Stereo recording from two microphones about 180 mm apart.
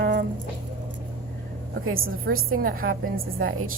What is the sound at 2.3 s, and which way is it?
A woman's voice, 55° right (ahead or behind).